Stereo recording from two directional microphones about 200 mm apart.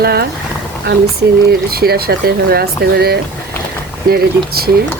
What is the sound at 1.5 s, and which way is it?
Speech, 50° right (ahead or behind).